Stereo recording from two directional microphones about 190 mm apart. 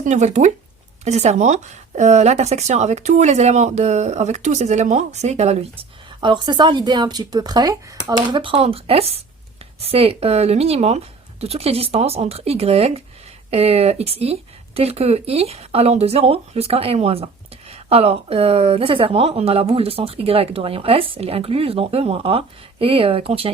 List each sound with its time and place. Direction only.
0.0 s speech: 40° right (ahead or behind)
6.1 s speech: 25° right (ahead or behind)